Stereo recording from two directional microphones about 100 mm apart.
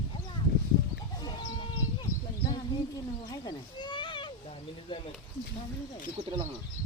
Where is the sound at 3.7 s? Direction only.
55° left (ahead or behind).